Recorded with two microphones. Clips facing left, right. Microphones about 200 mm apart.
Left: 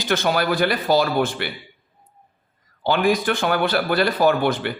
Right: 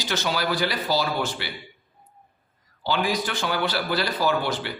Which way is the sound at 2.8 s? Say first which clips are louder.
Left 6 dB; 55° left (ahead or behind).